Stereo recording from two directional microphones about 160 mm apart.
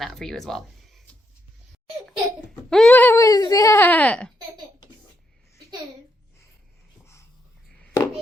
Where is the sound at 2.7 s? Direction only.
5° left (ahead or behind).